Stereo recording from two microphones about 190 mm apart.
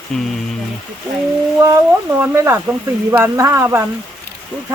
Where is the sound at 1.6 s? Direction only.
15° right (ahead or behind).